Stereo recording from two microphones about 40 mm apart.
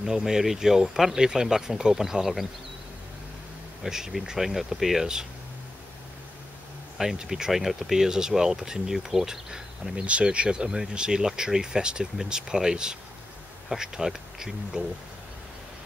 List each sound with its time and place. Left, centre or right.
0.0 s speech: centre
3.8 s speech: centre
7.0 s speech: centre
10.0 s speech: right; by 14.9 s centre